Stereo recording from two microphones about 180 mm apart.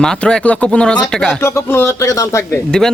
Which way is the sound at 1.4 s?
15° left (ahead or behind).